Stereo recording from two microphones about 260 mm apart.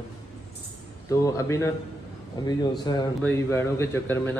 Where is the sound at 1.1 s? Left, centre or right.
Centre.